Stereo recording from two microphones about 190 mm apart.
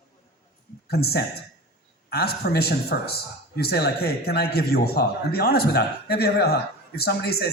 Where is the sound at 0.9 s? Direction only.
55° left (ahead or behind).